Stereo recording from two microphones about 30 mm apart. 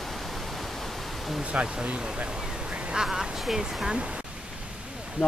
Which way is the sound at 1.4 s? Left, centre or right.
Right.